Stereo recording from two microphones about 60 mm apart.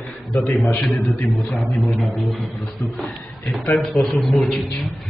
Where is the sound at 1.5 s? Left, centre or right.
Left.